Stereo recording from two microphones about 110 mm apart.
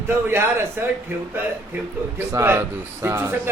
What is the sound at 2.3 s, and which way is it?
A man's voice, 20° right (ahead or behind).